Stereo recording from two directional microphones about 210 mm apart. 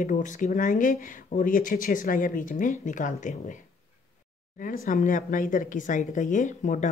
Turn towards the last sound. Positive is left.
turn(degrees=35)  # may be behind; listen again after turning